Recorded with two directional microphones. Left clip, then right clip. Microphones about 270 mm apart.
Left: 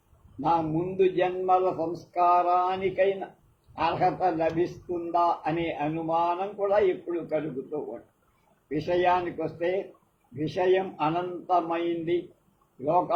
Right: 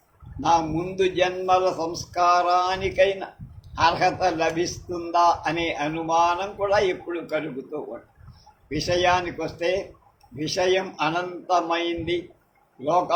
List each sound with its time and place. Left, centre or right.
0.4 s a man's voice: right